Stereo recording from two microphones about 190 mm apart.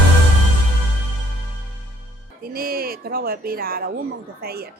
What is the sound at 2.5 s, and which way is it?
A woman's voice, 50° right (ahead or behind).